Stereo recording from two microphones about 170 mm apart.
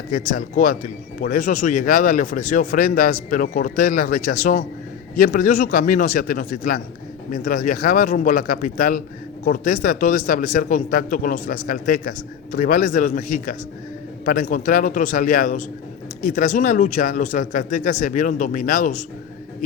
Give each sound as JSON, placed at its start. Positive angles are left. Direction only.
{"t": 0.1, "sound": "a man's voice", "side_deg": 55}